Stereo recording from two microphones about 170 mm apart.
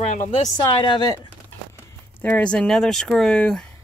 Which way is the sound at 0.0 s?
40° left (ahead or behind).